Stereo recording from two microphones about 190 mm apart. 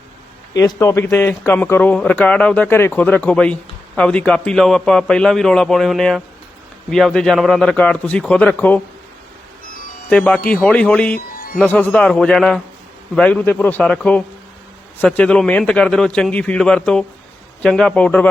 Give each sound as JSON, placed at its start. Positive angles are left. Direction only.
{"t": 0.5, "sound": "a man's voice", "side_deg": 15}
{"t": 10.1, "sound": "a man's voice", "side_deg": 5}